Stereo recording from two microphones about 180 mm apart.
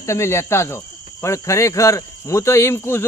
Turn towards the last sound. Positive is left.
turn(degrees=15)  # may be behind; listen again after turning